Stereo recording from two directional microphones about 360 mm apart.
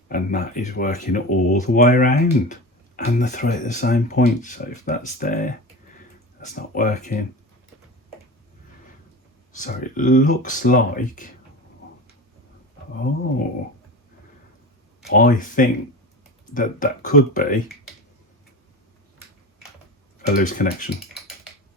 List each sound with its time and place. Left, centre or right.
0.1 s speech: left
9.5 s speech: left
15.0 s speech: left
20.2 s speech: left